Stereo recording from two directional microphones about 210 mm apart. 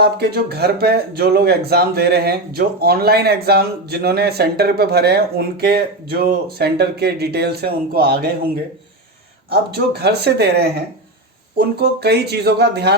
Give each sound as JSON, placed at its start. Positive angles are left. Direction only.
{"t": 0.0, "sound": "speech", "side_deg": -50}
{"t": 9.7, "sound": "speech", "side_deg": -50}